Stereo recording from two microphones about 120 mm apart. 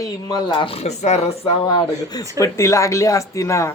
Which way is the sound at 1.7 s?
35° left (ahead or behind).